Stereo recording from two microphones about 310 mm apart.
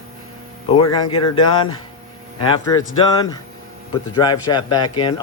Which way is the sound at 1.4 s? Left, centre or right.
Centre.